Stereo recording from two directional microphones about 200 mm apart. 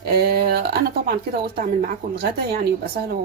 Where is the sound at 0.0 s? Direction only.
50° right (ahead or behind).